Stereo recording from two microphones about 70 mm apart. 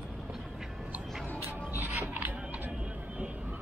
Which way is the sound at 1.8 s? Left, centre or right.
Right.